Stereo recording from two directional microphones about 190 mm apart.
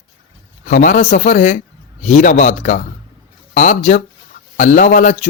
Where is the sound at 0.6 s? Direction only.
45° left (ahead or behind).